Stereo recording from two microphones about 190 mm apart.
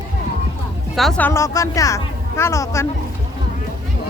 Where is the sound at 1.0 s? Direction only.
5° left (ahead or behind).